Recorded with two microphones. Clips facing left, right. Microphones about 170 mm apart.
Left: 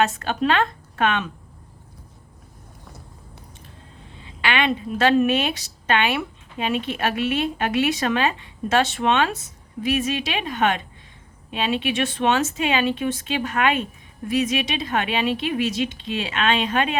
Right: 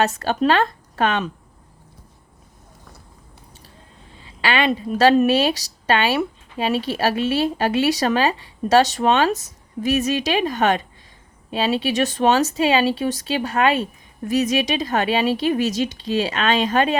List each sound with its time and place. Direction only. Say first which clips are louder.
0.0 s a woman's voice: right 2 dB; 40° right (ahead or behind)
4.4 s a woman's voice: right 2 dB; 35° right (ahead or behind)